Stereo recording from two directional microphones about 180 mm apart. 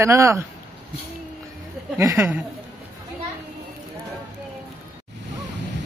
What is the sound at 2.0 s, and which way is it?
Mantra, 15° right (ahead or behind).